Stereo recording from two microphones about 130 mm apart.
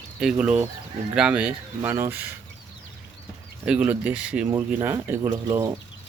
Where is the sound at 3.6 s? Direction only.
10° right (ahead or behind).